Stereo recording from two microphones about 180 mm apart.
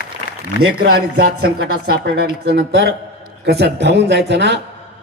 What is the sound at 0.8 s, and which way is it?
Speech, 60° right (ahead or behind).